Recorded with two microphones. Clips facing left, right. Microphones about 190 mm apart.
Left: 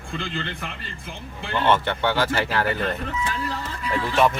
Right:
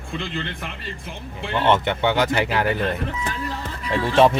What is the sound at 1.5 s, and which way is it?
Speech, 20° right (ahead or behind).